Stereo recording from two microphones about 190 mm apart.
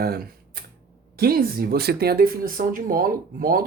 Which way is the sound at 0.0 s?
55° right (ahead or behind).